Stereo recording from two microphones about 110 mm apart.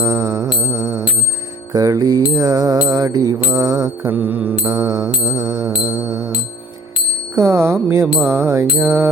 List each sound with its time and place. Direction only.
0.0 s music: 30° right (ahead or behind)
1.7 s mantra: 35° right (ahead or behind)
4.1 s mantra: 15° right (ahead or behind)
4.7 s mantra: 35° right (ahead or behind)
7.3 s mantra: 25° right (ahead or behind)